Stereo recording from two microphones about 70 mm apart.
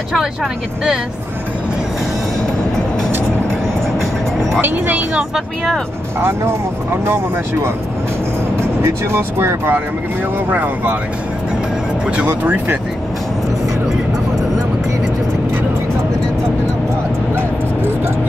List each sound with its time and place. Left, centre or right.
0.1 s speech: centre
4.6 s speech: right
6.2 s speech: right
8.8 s speech: right
10.5 s speech: right
12.3 s speech: right